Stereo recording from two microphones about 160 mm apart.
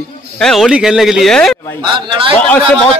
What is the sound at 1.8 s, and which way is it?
Speech, 30° right (ahead or behind).